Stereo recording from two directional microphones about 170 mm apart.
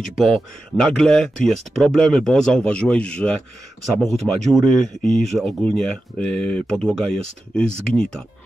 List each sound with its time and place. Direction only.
0.2 s speech: centre (ahead or behind)